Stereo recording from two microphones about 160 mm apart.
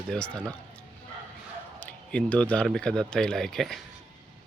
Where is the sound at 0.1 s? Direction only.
5° left (ahead or behind).